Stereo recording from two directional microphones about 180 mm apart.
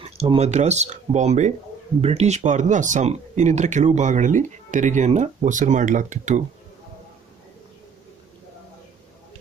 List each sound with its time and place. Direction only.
0.0 s speech: 35° right (ahead or behind)